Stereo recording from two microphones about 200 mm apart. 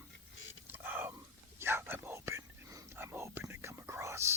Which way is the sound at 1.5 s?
10° right (ahead or behind).